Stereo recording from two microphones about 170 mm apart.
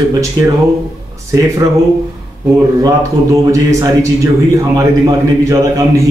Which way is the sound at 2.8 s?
20° right (ahead or behind).